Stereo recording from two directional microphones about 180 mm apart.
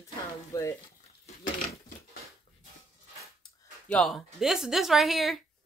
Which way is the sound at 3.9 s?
Centre (ahead or behind).